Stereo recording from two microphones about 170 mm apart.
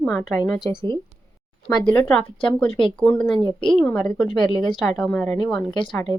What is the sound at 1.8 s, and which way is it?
Speech, 10° left (ahead or behind).